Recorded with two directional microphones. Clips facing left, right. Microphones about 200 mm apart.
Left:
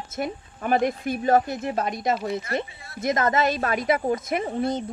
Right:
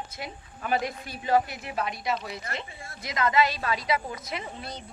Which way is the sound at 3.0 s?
45° left (ahead or behind).